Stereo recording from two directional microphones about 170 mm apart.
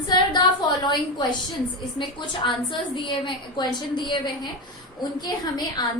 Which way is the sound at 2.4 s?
30° left (ahead or behind).